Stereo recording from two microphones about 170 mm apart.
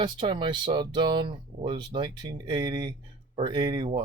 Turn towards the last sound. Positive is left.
turn(degrees=-25)  # may be behind; listen again after turning